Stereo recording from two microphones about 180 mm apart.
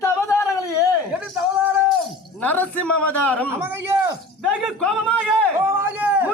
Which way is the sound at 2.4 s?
10° left (ahead or behind).